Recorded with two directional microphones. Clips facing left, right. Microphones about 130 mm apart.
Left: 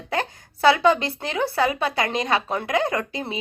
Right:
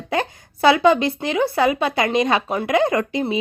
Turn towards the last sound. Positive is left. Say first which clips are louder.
# right 6 dB
turn(degrees=-15)  # may be behind; listen again after turning